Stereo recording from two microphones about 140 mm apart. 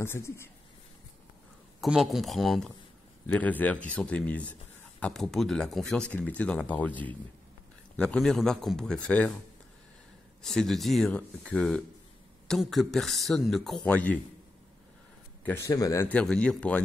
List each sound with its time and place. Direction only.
0.0 s speech: 15° left (ahead or behind)
1.8 s a man's voice: centre (ahead or behind)
3.3 s a man's voice: 10° left (ahead or behind)
10.4 s a man's voice: 5° left (ahead or behind)
15.4 s speech: 15° left (ahead or behind)
16.1 s speech: 10° left (ahead or behind)